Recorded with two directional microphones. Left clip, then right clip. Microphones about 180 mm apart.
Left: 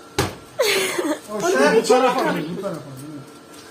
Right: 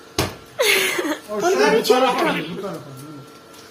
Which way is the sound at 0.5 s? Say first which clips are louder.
Right 2 dB; 10° left (ahead or behind).